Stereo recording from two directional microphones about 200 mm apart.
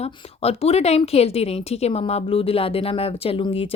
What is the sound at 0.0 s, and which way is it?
A woman's voice, 30° left (ahead or behind).